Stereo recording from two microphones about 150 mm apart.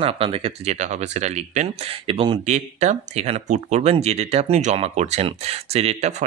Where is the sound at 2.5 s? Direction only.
50° right (ahead or behind).